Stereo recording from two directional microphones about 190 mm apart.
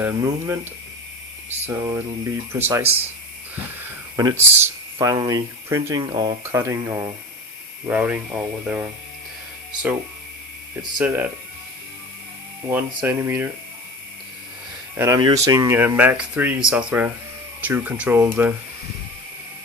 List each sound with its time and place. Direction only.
0.0 s speech: 15° right (ahead or behind)
4.2 s speech: 15° right (ahead or behind)
11.0 s speech: 10° right (ahead or behind)
12.6 s speech: 10° right (ahead or behind)
14.9 s speech: 15° right (ahead or behind)